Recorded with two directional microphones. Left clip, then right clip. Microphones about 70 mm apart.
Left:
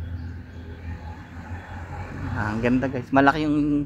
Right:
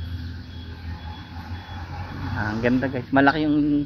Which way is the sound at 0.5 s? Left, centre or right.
Centre.